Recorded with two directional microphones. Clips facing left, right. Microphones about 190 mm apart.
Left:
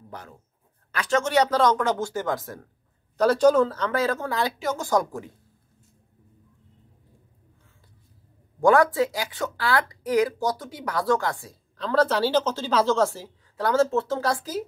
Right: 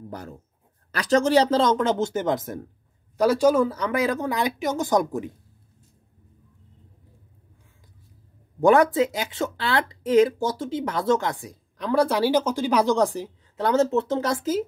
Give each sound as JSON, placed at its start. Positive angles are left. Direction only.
{"t": 0.1, "sound": "speech", "side_deg": -40}
{"t": 3.2, "sound": "speech", "side_deg": -10}
{"t": 8.5, "sound": "speech", "side_deg": -20}